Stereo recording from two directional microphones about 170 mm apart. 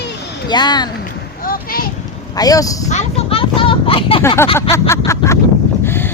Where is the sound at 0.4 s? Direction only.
25° left (ahead or behind).